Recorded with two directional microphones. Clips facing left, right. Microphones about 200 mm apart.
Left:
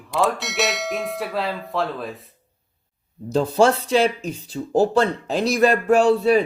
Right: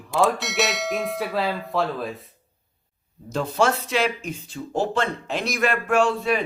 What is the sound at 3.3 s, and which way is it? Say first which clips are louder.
Speech: left 5 dB; 30° left (ahead or behind).